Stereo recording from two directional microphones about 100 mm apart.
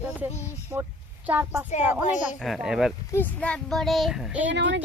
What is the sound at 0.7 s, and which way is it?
Speech, 25° right (ahead or behind).